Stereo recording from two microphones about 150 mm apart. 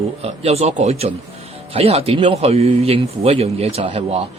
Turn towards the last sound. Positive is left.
turn(degrees=-45)  # may be behind; listen again after turning